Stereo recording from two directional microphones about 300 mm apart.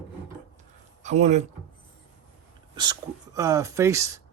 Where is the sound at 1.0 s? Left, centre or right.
Right.